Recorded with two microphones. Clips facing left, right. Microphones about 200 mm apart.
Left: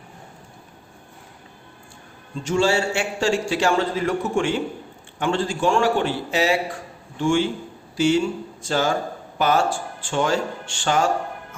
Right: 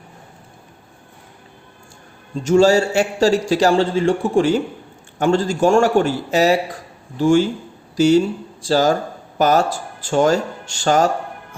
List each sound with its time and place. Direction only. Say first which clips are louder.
2.3 s a man's voice: right 7 dB; 40° right (ahead or behind)